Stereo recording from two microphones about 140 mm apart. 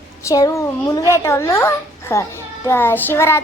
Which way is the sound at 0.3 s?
25° left (ahead or behind).